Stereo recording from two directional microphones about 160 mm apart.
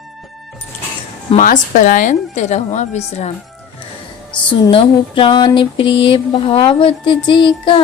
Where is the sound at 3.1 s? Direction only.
40° left (ahead or behind).